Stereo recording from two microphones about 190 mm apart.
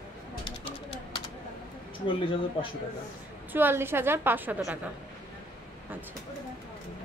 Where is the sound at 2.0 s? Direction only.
25° left (ahead or behind).